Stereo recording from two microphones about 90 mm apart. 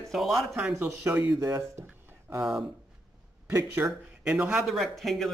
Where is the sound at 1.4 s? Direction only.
35° right (ahead or behind).